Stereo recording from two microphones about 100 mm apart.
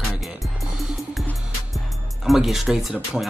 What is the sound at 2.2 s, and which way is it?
Speech, centre (ahead or behind).